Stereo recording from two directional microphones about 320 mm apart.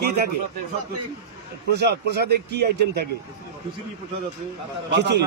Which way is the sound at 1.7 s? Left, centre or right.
Right.